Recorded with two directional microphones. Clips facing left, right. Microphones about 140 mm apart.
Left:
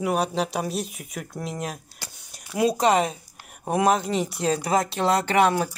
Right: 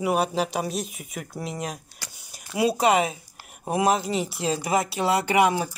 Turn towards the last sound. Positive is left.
turn(degrees=-10)  # may be behind; listen again after turning